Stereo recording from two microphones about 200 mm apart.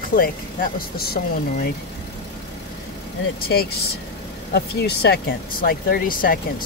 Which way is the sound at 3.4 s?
50° left (ahead or behind).